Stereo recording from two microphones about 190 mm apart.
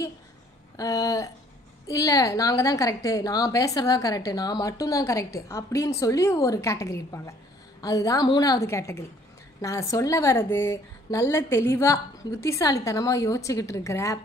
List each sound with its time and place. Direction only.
0.7 s a woman's voice: 20° left (ahead or behind)